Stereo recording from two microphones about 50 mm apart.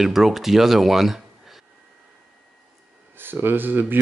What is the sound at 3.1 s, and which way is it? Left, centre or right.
Speech, right.